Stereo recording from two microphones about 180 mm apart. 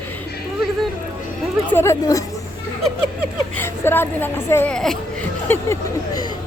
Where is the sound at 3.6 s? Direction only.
10° left (ahead or behind).